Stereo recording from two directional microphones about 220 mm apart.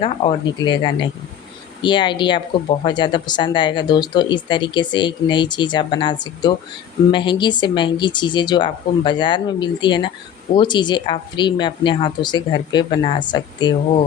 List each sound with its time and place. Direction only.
0.0 s speech: 25° left (ahead or behind)